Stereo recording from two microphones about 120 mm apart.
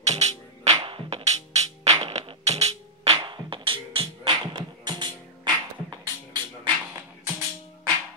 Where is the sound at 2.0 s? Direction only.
55° right (ahead or behind).